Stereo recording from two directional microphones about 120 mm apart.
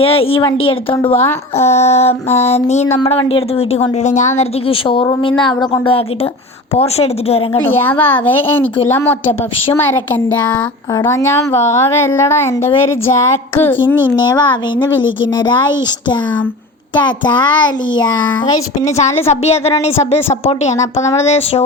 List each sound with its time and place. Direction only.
0.0 s a woman's voice: 50° left (ahead or behind); by 3.0 s 70° left (ahead or behind)
3.1 s speech: 55° left (ahead or behind); by 4.4 s 85° left
4.7 s speech: 50° left (ahead or behind)
6.7 s a woman's voice: 55° left (ahead or behind)
7.8 s speech: 15° left (ahead or behind)
11.0 s a woman's voice: 25° left (ahead or behind)
14.2 s a child's voice: 35° left (ahead or behind)
19.3 s a woman's voice: 60° left (ahead or behind)
20.7 s a woman's voice: 25° left (ahead or behind)
21.2 s a woman's voice: 60° left (ahead or behind)